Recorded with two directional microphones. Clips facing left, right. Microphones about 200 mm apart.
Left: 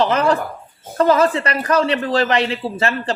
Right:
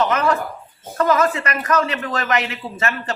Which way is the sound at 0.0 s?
30° left (ahead or behind).